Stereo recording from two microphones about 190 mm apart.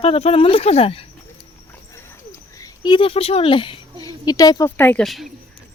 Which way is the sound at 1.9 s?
15° left (ahead or behind).